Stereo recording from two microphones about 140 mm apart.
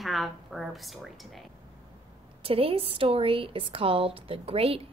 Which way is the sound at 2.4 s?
40° right (ahead or behind).